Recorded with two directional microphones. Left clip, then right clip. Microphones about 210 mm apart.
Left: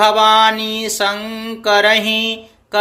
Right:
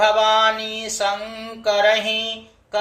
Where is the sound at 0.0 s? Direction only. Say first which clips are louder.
Left 5 dB; 50° left (ahead or behind).